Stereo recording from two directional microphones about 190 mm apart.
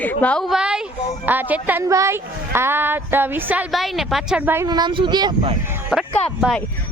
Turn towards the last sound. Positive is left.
turn(degrees=0)  # may be behind; listen again after turning